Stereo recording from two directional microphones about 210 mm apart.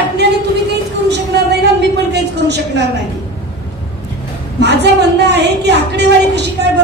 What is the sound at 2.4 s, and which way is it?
Speech, 55° right (ahead or behind).